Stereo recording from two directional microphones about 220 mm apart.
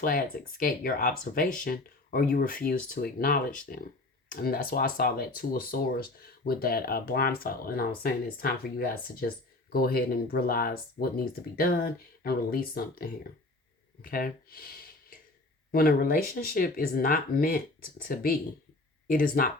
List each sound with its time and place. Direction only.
0.0 s speech: 40° left (ahead or behind)